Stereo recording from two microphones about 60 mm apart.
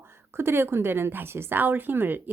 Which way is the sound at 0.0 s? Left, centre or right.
Right.